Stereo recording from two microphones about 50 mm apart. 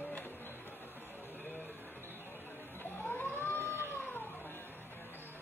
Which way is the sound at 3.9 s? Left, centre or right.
Left.